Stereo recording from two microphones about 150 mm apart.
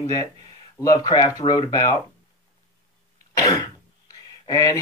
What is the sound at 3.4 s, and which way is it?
Throat clearing, 20° left (ahead or behind).